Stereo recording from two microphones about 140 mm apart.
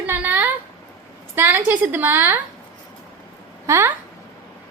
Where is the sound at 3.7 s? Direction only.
20° right (ahead or behind).